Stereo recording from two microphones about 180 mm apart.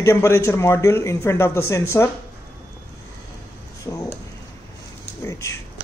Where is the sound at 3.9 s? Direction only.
15° left (ahead or behind).